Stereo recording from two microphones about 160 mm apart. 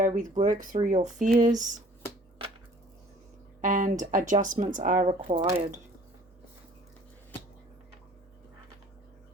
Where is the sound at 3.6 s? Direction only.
55° right (ahead or behind).